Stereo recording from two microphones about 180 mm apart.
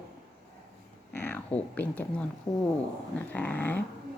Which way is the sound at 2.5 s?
15° left (ahead or behind).